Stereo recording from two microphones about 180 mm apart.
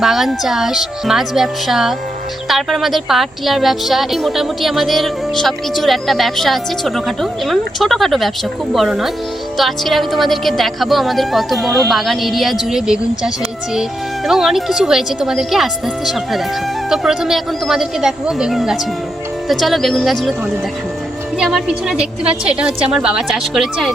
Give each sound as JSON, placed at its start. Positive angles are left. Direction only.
{"t": 0.0, "sound": "a woman's voice", "side_deg": 0}
{"t": 21.3, "sound": "a woman's voice", "side_deg": -5}